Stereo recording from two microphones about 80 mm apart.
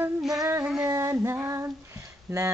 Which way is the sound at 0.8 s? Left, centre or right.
Right.